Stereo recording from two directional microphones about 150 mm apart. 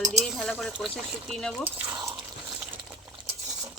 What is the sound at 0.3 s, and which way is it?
Speech, centre (ahead or behind).